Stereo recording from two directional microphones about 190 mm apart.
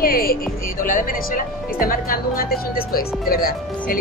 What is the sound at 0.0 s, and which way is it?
Speech, 50° left (ahead or behind).